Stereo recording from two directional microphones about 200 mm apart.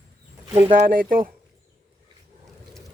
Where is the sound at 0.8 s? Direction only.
45° right (ahead or behind).